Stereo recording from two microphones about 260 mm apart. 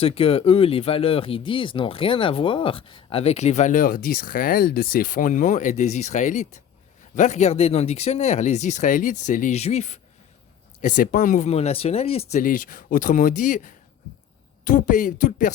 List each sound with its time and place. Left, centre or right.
0.0 s speech: left